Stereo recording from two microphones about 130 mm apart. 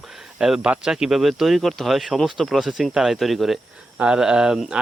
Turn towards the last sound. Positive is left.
turn(degrees=-5)  # may be behind; listen again after turning